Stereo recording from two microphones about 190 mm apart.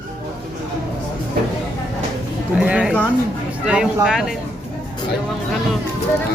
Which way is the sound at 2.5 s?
5° right (ahead or behind).